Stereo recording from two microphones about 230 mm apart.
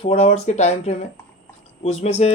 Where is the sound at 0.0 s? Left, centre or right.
Left.